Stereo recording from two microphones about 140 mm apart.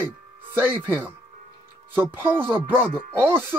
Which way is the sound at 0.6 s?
15° right (ahead or behind).